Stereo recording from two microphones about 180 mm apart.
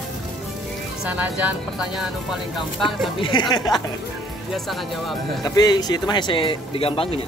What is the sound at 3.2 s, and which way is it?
Speech, 25° left (ahead or behind).